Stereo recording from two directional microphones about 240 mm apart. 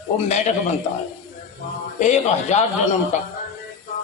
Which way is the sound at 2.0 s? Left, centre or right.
Left.